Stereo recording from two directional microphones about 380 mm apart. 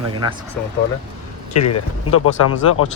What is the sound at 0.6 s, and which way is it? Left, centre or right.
Speech, centre.